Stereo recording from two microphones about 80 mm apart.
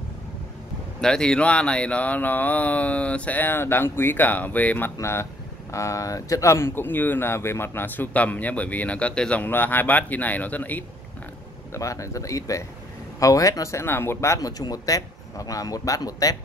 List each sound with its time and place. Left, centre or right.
1.0 s speech: centre
5.0 s speech: left; by 9.4 s centre
9.4 s speech: left
11.7 s speech: left
14.6 s speech: left